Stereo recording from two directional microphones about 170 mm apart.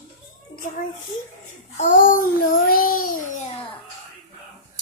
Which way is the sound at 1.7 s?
50° left (ahead or behind).